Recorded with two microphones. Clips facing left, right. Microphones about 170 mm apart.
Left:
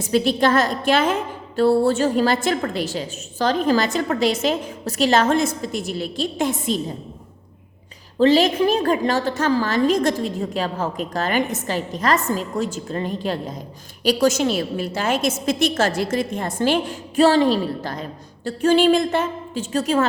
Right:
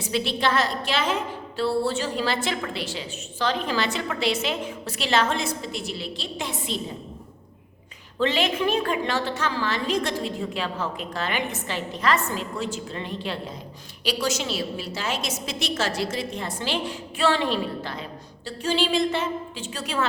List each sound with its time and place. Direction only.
0.0 s a woman's voice: 45° left (ahead or behind)
8.2 s a woman's voice: 35° left (ahead or behind)